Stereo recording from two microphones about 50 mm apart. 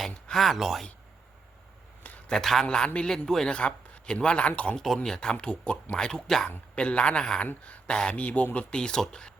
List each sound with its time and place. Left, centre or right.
0.3 s speech: centre
2.2 s a man's voice: centre
2.6 s a man's voice: centre
3.2 s speech: centre
3.5 s a man's voice: centre
5.0 s speech: centre
6.7 s a man's voice: left
8.1 s a man's voice: left
8.7 s speech: centre